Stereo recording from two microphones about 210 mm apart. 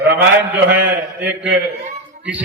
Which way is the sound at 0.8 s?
55° right (ahead or behind).